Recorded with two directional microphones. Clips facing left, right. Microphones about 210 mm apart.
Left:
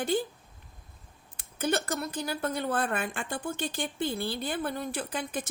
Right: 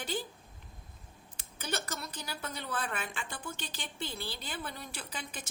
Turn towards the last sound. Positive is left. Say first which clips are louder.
# left 10 dB
turn(degrees=55)  # may be behind; listen again after turning